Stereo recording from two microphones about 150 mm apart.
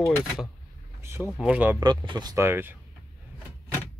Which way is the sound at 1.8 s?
30° right (ahead or behind).